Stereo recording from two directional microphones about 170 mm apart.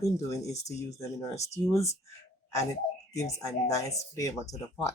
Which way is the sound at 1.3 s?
40° left (ahead or behind).